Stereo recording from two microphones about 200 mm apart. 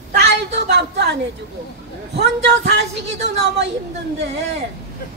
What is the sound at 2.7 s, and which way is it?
Speech, 60° right (ahead or behind).